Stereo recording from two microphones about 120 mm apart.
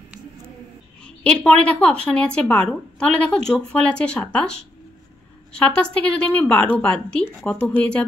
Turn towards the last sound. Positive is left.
turn(degrees=10)  # may be behind; listen again after turning